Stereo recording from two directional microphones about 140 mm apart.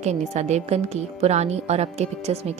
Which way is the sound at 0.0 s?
55° right (ahead or behind).